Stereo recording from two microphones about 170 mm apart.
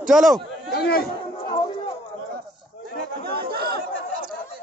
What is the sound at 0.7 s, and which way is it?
Chatter, 65° left (ahead or behind).